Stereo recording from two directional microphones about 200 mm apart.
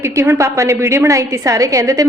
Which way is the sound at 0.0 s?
15° right (ahead or behind).